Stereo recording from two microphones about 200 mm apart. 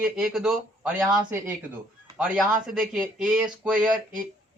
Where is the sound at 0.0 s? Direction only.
5° right (ahead or behind).